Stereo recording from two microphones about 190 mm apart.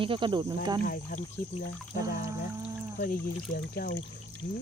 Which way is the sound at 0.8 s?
50° left (ahead or behind).